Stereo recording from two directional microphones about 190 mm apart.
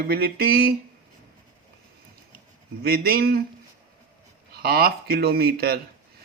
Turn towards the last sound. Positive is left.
turn(degrees=-55)  # may be behind; listen again after turning